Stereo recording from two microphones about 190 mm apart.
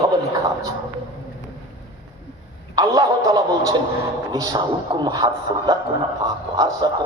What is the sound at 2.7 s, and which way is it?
Speech, 20° right (ahead or behind).